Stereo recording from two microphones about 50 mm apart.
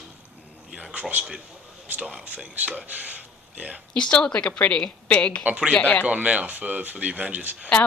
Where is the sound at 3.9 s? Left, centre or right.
Centre.